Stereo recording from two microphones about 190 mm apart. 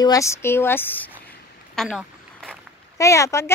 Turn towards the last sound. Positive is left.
turn(degrees=15)  # may be behind; listen again after turning